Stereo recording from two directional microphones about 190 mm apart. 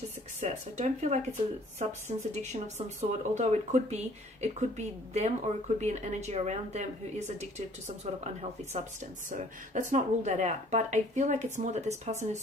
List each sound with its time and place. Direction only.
0.3 s speech: 35° right (ahead or behind)
7.9 s speech: 35° right (ahead or behind)